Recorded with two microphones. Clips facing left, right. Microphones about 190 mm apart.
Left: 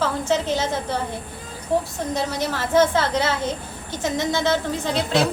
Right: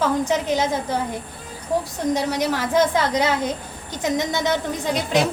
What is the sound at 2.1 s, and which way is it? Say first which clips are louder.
A woman's voice: right 1 dB; 15° right (ahead or behind).